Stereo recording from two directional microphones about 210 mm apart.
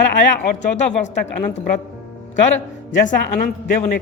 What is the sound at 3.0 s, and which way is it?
Speech, 40° left (ahead or behind).